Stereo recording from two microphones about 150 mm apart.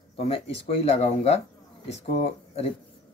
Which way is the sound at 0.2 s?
45° left (ahead or behind).